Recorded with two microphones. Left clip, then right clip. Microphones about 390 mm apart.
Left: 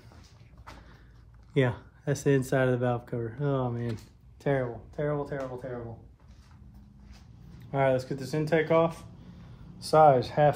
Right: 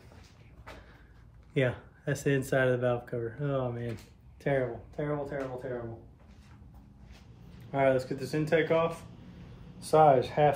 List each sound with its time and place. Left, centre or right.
1.5 s speech: centre
7.7 s speech: centre